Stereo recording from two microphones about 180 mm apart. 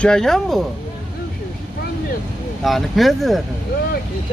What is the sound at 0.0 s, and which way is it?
Speech, 5° left (ahead or behind).